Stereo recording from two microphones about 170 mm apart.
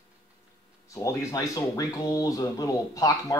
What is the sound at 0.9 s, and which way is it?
Speech, 20° left (ahead or behind).